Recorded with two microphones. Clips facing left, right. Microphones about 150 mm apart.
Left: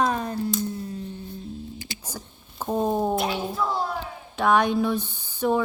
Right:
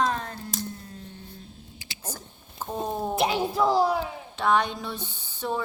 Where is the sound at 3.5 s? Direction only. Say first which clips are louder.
Right 5 dB; 90° right.